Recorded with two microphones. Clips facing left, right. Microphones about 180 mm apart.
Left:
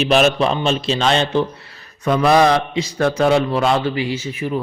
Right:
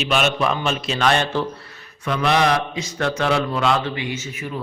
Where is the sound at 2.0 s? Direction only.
40° left (ahead or behind).